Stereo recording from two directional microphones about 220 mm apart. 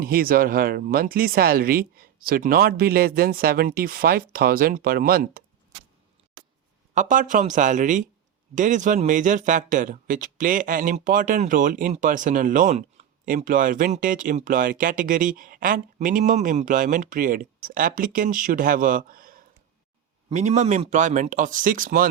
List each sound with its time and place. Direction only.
0.0 s speech: 40° right (ahead or behind)
6.9 s a man's voice: 35° right (ahead or behind)